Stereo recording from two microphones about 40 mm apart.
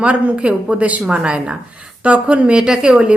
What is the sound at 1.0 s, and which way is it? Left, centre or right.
Speech, right.